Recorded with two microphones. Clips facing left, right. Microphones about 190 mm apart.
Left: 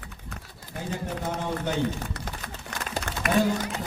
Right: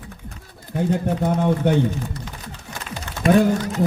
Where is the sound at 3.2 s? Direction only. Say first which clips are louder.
Right 9 dB; 30° right (ahead or behind).